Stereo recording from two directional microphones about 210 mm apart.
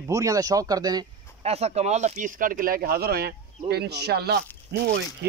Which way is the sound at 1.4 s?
30° right (ahead or behind).